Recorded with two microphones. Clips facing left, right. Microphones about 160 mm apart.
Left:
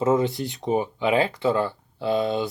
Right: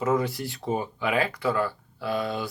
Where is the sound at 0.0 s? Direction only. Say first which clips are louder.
Left 4 dB; 25° left (ahead or behind).